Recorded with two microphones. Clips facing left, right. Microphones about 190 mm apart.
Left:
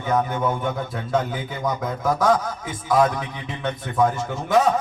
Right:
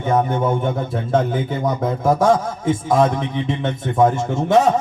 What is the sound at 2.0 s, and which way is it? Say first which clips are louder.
A man's voice: right 4 dB; 25° right (ahead or behind).